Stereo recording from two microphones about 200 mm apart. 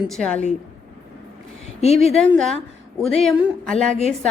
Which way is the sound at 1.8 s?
30° left (ahead or behind).